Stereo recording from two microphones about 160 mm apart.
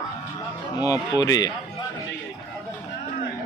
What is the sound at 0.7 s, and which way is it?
Speech, 20° left (ahead or behind).